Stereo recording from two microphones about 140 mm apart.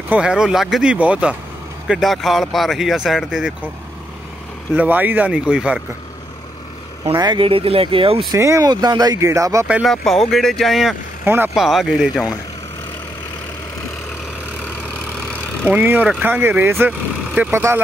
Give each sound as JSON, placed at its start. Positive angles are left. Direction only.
{"t": 0.1, "sound": "speech", "side_deg": -5}
{"t": 4.7, "sound": "speech", "side_deg": -10}
{"t": 7.1, "sound": "speech", "side_deg": -35}
{"t": 8.3, "sound": "speech", "side_deg": -20}
{"t": 9.7, "sound": "speech", "side_deg": -5}
{"t": 11.2, "sound": "speech", "side_deg": -15}
{"t": 11.5, "sound": "speech", "side_deg": 0}
{"t": 15.6, "sound": "speech", "side_deg": -15}